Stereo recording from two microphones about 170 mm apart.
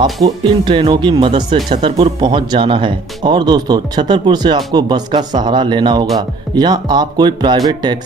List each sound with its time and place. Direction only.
0.0 s speech: 25° right (ahead or behind)